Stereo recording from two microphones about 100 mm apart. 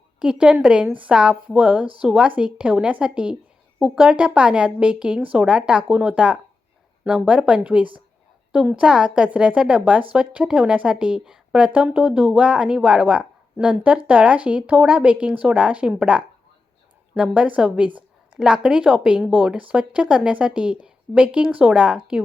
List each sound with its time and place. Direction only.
0.2 s a woman's voice: 10° right (ahead or behind)
17.3 s a woman's voice: 10° right (ahead or behind)